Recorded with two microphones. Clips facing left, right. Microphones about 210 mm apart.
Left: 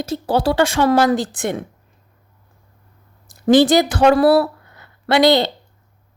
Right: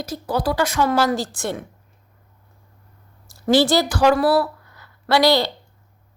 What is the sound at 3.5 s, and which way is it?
Speech, 20° left (ahead or behind).